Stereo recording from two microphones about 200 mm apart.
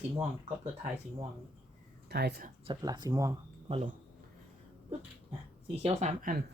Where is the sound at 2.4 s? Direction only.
30° right (ahead or behind).